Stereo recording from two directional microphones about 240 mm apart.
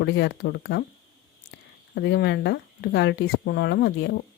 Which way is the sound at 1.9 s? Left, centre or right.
Left.